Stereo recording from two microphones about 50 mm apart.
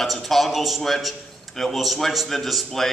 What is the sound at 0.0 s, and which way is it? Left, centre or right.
A man's voice, centre.